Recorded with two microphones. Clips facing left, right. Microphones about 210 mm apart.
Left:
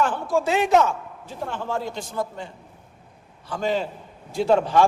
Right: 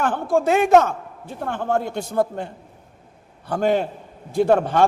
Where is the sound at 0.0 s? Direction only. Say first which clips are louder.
Right 2 dB; 55° right (ahead or behind).